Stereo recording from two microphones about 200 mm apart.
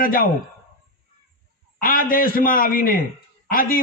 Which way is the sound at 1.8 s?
45° left (ahead or behind).